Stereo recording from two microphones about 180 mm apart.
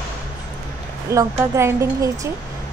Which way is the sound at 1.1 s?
15° right (ahead or behind).